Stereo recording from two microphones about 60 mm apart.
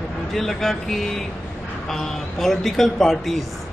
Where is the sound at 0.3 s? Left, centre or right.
Centre.